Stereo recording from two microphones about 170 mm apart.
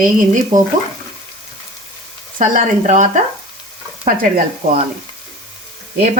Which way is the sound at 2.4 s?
50° right (ahead or behind).